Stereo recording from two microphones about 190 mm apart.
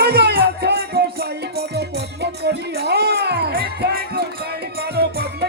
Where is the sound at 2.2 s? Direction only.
60° right (ahead or behind).